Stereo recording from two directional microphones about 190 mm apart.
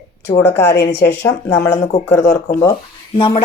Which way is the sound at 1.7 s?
35° left (ahead or behind).